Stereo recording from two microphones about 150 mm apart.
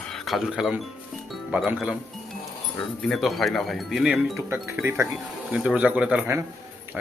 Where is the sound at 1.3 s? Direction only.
Centre (ahead or behind).